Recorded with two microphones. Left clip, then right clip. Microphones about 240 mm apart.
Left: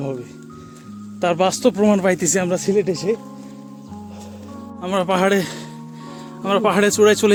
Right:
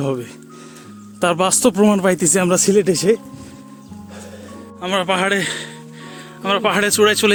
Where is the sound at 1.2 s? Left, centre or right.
Right.